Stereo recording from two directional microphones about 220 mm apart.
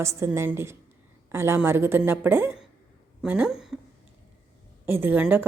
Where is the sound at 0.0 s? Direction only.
15° right (ahead or behind).